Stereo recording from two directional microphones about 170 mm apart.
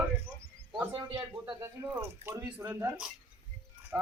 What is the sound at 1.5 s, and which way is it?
Speech, 10° right (ahead or behind).